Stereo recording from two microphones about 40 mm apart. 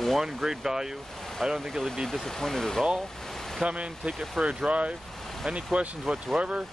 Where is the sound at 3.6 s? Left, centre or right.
Right.